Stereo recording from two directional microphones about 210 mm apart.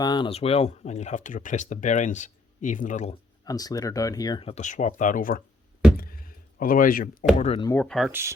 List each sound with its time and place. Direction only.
0.0 s speech: 20° left (ahead or behind)
3.4 s speech: 15° left (ahead or behind); by 5.4 s 40° left (ahead or behind)
6.0 s a sound: 45° left (ahead or behind)
7.3 s speech: 30° left (ahead or behind)
7.6 s speech: 10° left (ahead or behind)